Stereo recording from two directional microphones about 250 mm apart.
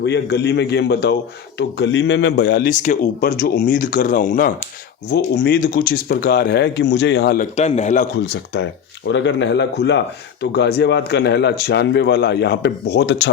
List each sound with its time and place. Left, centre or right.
0.0 s speech: left
7.5 s a man's voice: left
8.1 s speech: left